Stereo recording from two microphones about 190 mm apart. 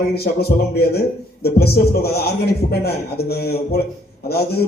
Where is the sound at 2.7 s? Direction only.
55° left (ahead or behind).